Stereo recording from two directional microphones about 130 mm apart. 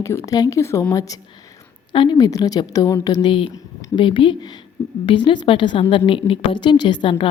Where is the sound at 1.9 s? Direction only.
35° left (ahead or behind).